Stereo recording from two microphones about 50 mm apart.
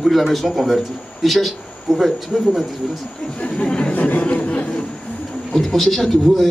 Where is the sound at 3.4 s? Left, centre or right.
Left.